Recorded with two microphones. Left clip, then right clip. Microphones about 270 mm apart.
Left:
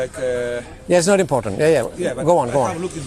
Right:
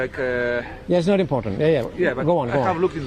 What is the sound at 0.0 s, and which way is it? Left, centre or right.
Speech, left.